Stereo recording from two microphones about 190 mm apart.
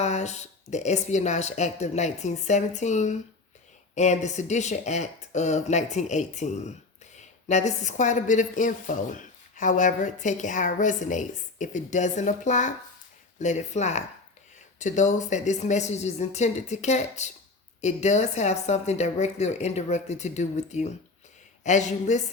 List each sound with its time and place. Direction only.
0.0 s a woman's voice: 35° left (ahead or behind)